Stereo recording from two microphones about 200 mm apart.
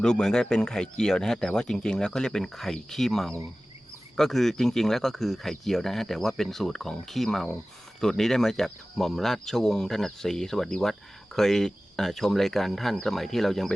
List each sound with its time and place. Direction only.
0.0 s speech: 5° left (ahead or behind)